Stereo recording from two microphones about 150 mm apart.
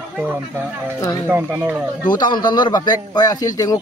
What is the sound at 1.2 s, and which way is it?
Speech, 15° right (ahead or behind).